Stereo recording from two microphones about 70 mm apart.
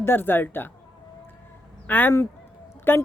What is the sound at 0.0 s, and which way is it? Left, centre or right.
Speech, left.